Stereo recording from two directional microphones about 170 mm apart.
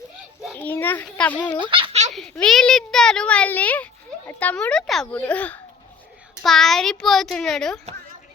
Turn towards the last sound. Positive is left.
turn(degrees=5)  # may be behind; listen again after turning